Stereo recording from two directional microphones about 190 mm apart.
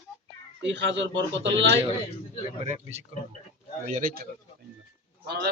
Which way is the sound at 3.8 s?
45° right (ahead or behind).